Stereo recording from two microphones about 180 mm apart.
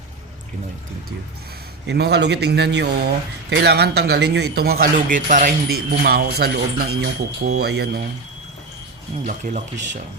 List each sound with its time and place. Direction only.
1.9 s a man's voice: 70° right (ahead or behind)
9.2 s speech: 45° right (ahead or behind)